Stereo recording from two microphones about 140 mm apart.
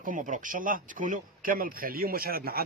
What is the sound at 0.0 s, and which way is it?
Speech, 70° right (ahead or behind).